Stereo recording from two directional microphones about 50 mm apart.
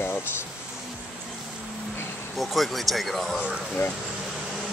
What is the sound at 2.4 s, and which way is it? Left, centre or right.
Speech, centre.